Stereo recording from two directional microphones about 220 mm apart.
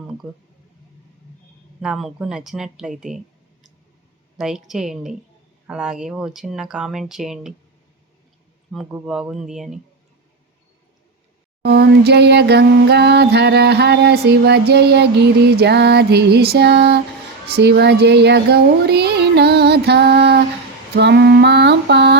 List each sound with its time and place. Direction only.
1.8 s speech: centre (ahead or behind)
4.4 s speech: centre (ahead or behind)
8.7 s speech: centre (ahead or behind)
11.6 s a sound: 50° right (ahead or behind)
17.5 s child singing: 50° right (ahead or behind)
20.9 s a sound: 50° right (ahead or behind)